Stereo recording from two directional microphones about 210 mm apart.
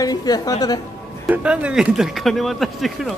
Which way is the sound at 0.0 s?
20° left (ahead or behind).